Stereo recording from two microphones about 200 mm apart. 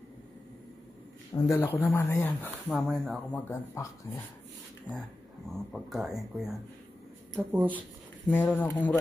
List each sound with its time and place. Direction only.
1.3 s speech: 15° left (ahead or behind)
5.5 s speech: centre (ahead or behind)
8.3 s speech: 10° left (ahead or behind)